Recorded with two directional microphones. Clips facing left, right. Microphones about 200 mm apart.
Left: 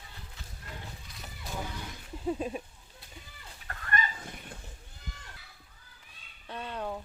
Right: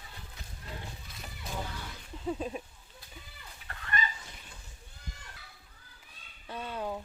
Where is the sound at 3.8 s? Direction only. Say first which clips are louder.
Left 2 dB; 55° left (ahead or behind).